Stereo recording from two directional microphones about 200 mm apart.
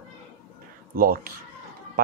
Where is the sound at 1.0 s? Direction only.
45° right (ahead or behind).